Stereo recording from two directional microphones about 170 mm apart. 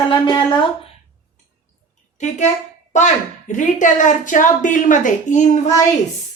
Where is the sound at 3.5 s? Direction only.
50° left (ahead or behind).